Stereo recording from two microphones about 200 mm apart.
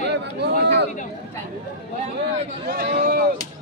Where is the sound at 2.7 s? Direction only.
50° right (ahead or behind).